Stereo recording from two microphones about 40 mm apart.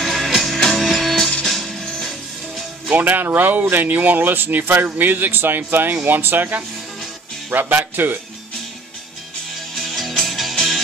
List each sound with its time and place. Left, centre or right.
0.0 s music: centre
3.0 s speech: right
7.5 s speech: right
9.8 s music: centre